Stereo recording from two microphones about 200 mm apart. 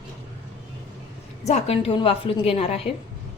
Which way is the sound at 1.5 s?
30° left (ahead or behind).